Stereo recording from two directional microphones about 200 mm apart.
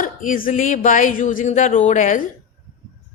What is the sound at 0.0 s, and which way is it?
A woman's voice, 40° left (ahead or behind).